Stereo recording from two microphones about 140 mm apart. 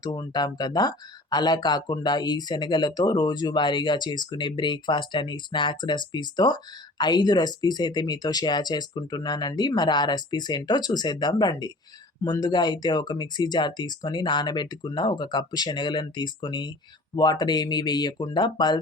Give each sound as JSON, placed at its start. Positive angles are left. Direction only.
{"t": 0.0, "sound": "speech", "side_deg": 25}